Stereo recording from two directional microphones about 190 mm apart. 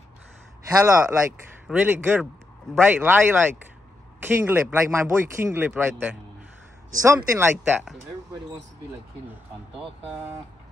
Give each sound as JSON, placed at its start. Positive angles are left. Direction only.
{"t": 0.7, "sound": "speech", "side_deg": -15}
{"t": 7.2, "sound": "speech", "side_deg": -10}
{"t": 7.5, "sound": "speech", "side_deg": 0}